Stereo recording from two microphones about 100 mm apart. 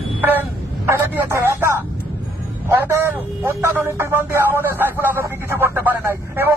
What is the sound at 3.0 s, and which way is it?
Speech, 20° right (ahead or behind).